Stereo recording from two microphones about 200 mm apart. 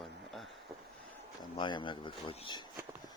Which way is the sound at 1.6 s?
25° left (ahead or behind).